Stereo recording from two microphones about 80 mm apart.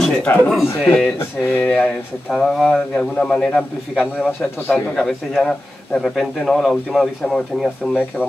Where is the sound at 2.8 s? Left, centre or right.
Centre.